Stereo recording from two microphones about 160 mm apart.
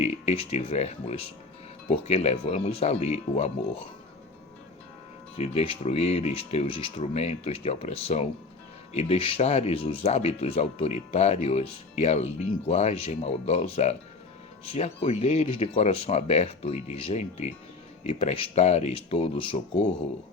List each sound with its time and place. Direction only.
0.0 s speech: 40° left (ahead or behind)
5.4 s speech: 40° left (ahead or behind)